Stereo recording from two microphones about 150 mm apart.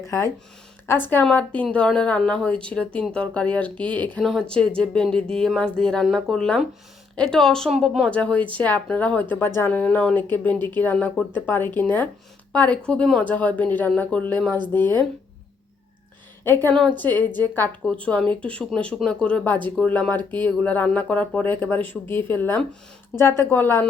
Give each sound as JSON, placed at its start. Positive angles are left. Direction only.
{"t": 0.0, "sound": "speech", "side_deg": 20}
{"t": 16.4, "sound": "speech", "side_deg": 15}